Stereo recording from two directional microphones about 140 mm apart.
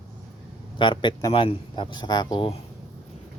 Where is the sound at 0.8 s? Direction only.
35° left (ahead or behind).